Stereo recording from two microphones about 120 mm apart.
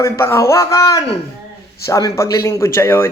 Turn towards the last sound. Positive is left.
turn(degrees=20)  # may be behind; listen again after turning